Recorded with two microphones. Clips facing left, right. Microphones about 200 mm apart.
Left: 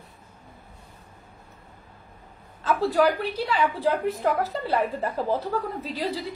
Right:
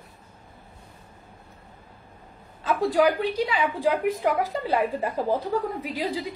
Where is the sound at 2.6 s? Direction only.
15° right (ahead or behind).